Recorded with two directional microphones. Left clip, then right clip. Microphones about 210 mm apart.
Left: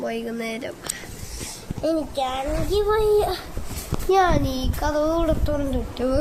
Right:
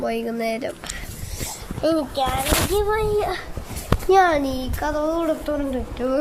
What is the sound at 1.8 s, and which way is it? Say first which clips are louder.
Speech: right 3 dB; 40° right (ahead or behind).